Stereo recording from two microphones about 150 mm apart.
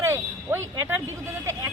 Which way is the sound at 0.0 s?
15° right (ahead or behind).